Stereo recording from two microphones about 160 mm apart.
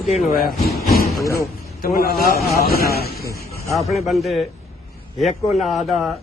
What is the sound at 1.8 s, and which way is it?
A man's voice, 70° left (ahead or behind).